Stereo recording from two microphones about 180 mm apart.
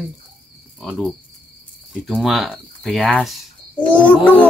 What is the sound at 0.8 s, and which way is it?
Speech, centre (ahead or behind).